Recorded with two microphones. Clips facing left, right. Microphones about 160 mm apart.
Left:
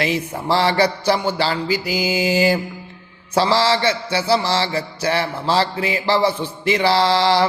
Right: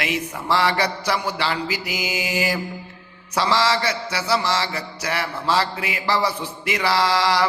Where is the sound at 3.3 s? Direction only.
30° left (ahead or behind).